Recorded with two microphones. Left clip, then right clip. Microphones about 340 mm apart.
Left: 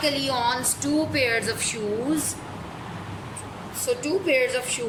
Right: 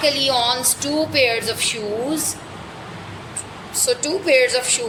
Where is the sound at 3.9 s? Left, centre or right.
Centre.